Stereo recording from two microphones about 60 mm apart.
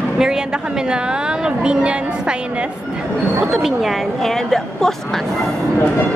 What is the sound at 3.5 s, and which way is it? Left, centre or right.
Speech, centre.